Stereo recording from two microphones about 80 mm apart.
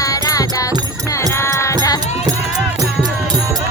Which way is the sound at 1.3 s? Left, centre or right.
Left.